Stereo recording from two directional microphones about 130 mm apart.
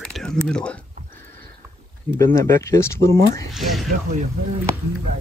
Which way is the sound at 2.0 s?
20° left (ahead or behind).